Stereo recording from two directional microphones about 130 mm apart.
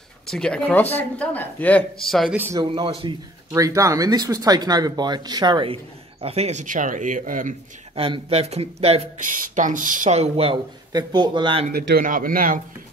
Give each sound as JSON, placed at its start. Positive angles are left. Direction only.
{"t": 0.3, "sound": "speech", "side_deg": 5}
{"t": 2.0, "sound": "speech", "side_deg": 0}
{"t": 2.3, "sound": "a man's voice", "side_deg": -15}
{"t": 2.6, "sound": "speech", "side_deg": -40}
{"t": 3.5, "sound": "speech", "side_deg": -25}
{"t": 6.2, "sound": "speech", "side_deg": -55}
{"t": 6.6, "sound": "speech", "side_deg": -80}
{"t": 7.9, "sound": "speech", "side_deg": -45}
{"t": 9.2, "sound": "speech", "side_deg": -85}
{"t": 10.1, "sound": "speech", "side_deg": -55}
{"t": 10.9, "sound": "speech", "side_deg": -30}
{"t": 12.0, "sound": "speech", "side_deg": -90}